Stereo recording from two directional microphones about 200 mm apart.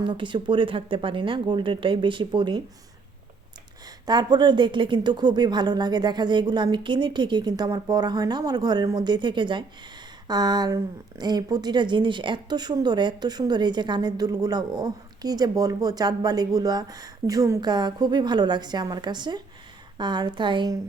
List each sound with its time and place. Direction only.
0.0 s speech: 25° right (ahead or behind)
4.0 s speech: 20° right (ahead or behind)